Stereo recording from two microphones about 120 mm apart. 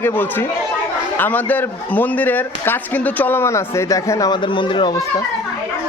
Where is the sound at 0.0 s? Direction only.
15° left (ahead or behind).